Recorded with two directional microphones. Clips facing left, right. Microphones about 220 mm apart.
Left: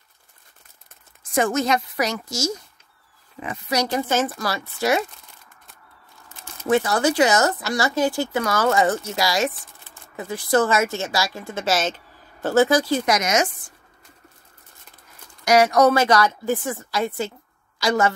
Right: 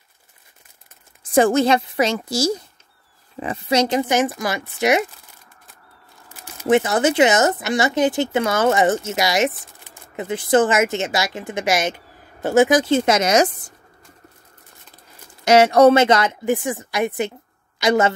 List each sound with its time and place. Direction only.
1.3 s a woman's voice: 30° right (ahead or behind)
6.4 s speech: 20° right (ahead or behind); by 13.7 s 35° right (ahead or behind)
15.4 s a woman's voice: 25° right (ahead or behind)